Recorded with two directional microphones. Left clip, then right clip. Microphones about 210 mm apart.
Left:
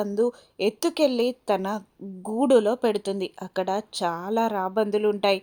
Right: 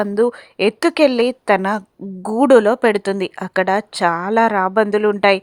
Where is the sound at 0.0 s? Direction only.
20° right (ahead or behind).